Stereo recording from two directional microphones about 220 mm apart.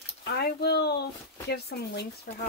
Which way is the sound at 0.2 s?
45° left (ahead or behind).